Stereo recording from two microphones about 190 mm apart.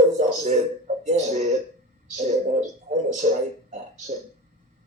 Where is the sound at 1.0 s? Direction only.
35° right (ahead or behind).